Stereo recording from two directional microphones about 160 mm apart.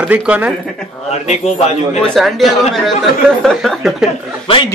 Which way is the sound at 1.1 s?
45° left (ahead or behind).